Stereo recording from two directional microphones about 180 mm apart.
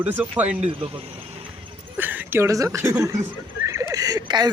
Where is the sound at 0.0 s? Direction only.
10° right (ahead or behind).